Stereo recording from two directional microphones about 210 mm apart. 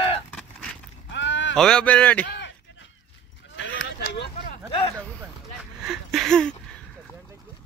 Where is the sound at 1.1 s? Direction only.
60° left (ahead or behind).